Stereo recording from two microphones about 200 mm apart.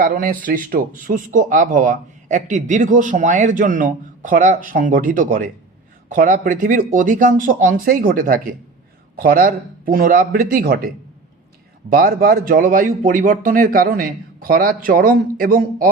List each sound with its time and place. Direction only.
0.0 s speech: 45° right (ahead or behind)